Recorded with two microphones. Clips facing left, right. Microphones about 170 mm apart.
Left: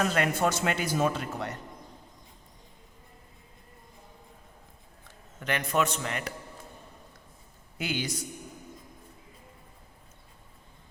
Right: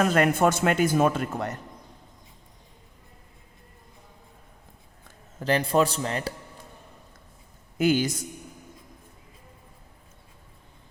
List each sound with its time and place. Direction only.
0.0 s a man's voice: 50° right (ahead or behind)
5.4 s a man's voice: 30° right (ahead or behind)
7.8 s a man's voice: 45° right (ahead or behind)